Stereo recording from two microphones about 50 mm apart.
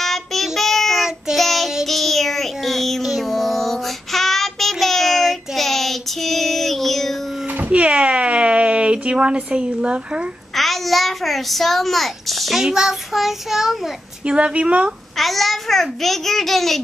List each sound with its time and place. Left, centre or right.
0.0 s child singing: centre
7.5 s a sound: right
10.5 s a child's voice: centre
12.7 s child singing: centre
14.2 s a woman's voice: right
15.1 s a child's voice: centre